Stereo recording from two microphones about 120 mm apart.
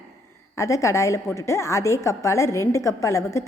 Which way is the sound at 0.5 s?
25° left (ahead or behind).